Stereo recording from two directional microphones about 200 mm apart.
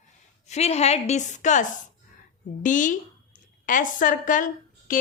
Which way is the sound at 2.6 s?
40° left (ahead or behind).